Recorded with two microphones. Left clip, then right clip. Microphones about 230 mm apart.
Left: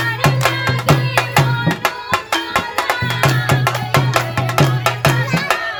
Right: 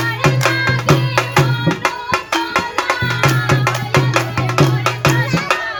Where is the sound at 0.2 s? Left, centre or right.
Left.